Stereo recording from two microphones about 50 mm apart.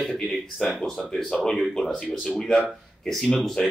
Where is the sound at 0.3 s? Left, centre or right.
Centre.